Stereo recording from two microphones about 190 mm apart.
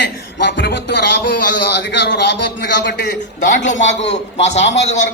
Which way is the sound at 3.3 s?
40° left (ahead or behind).